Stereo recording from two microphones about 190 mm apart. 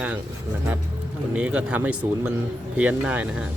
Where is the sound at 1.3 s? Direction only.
5° right (ahead or behind).